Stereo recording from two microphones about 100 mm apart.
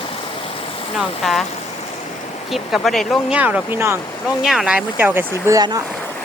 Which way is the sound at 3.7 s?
25° right (ahead or behind).